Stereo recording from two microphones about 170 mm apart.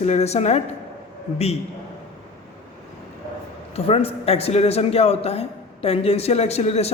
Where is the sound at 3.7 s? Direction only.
35° left (ahead or behind).